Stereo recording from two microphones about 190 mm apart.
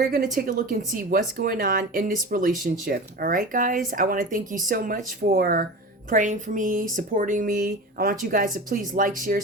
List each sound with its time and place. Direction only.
0.1 s speech: 50° right (ahead or behind)
6.1 s speech: 40° right (ahead or behind)